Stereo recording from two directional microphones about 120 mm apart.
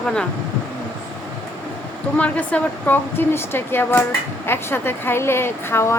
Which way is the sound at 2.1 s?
10° left (ahead or behind).